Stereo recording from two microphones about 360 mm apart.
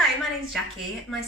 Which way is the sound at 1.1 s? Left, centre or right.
Centre.